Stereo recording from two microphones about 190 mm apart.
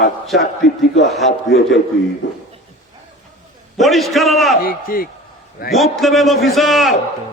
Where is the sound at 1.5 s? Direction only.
65° left (ahead or behind).